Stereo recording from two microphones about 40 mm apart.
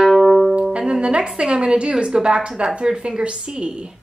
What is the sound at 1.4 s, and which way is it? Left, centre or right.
A woman's voice, right.